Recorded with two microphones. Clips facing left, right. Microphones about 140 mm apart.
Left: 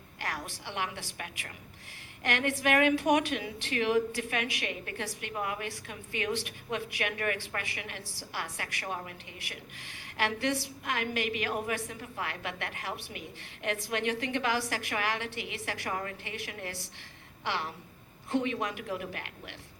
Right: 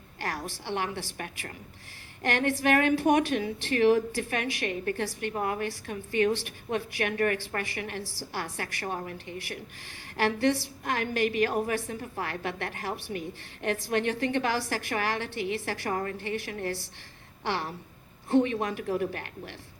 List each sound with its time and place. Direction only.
0.2 s a woman's voice: 35° right (ahead or behind)